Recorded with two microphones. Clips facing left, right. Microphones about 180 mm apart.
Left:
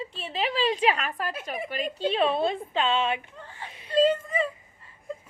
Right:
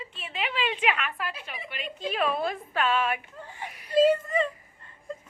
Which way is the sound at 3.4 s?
15° right (ahead or behind).